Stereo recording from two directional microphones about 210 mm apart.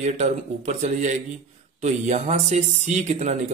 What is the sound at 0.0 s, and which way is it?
Speech, 35° right (ahead or behind).